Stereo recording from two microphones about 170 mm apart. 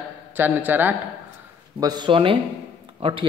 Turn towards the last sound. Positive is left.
turn(degrees=-30)  # may be behind; listen again after turning